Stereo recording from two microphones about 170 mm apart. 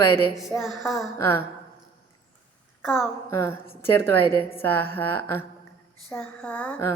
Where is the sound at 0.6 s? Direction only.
Centre (ahead or behind).